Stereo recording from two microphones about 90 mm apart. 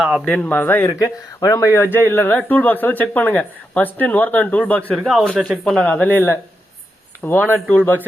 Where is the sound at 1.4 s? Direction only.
35° left (ahead or behind).